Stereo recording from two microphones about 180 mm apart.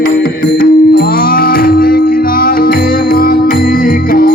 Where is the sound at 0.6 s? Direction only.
55° left (ahead or behind).